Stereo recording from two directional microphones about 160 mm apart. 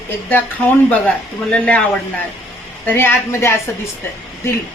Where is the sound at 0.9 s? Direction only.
10° left (ahead or behind).